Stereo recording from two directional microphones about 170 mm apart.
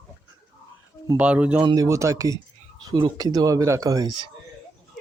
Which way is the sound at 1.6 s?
20° right (ahead or behind).